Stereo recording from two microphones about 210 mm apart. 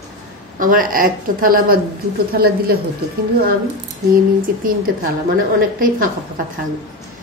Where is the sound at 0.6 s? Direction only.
40° right (ahead or behind).